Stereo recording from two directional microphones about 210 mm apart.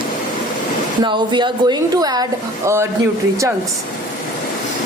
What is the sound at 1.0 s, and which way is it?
A woman's voice, 20° right (ahead or behind).